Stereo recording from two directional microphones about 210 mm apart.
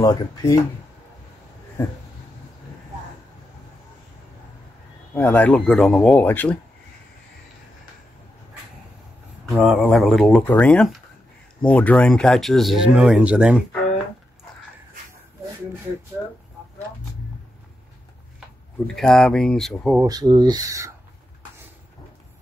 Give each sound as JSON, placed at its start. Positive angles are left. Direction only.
{"t": 0.0, "sound": "speech", "side_deg": 15}
{"t": 5.1, "sound": "speech", "side_deg": 5}
{"t": 9.5, "sound": "speech", "side_deg": 0}
{"t": 18.9, "sound": "speech", "side_deg": 0}
{"t": 20.0, "sound": "speech", "side_deg": -20}